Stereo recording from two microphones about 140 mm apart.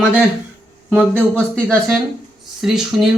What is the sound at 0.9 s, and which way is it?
Speech, 10° left (ahead or behind).